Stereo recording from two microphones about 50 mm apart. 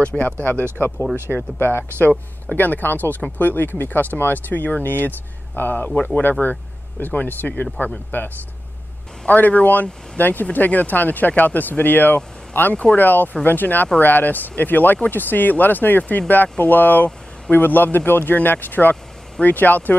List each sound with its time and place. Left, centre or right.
0.2 s speech: left
1.3 s speech: left
2.0 s speech: left
9.3 s speech: left